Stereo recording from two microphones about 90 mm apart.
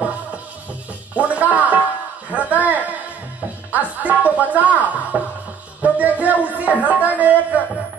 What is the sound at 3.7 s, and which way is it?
Music, 20° right (ahead or behind).